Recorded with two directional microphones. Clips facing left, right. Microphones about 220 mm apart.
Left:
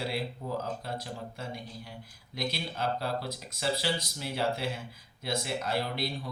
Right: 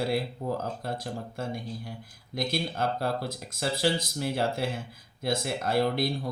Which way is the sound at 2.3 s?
50° right (ahead or behind).